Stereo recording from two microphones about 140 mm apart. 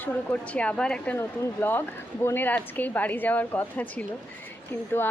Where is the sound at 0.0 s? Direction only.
10° left (ahead or behind).